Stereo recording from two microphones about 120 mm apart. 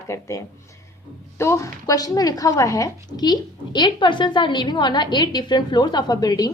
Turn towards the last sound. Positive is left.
turn(degrees=35)  # may be behind; listen again after turning